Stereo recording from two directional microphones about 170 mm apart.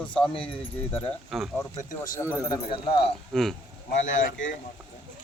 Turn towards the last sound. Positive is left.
turn(degrees=90)